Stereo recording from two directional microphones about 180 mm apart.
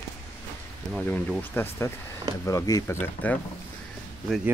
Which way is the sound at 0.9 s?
5° left (ahead or behind).